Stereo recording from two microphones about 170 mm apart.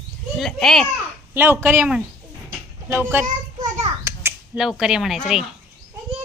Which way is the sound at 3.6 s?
20° right (ahead or behind).